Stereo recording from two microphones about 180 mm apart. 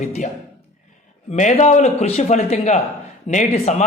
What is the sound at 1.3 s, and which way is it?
Speech, 40° left (ahead or behind).